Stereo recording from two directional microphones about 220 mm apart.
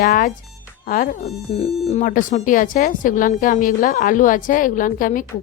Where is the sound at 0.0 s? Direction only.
40° left (ahead or behind).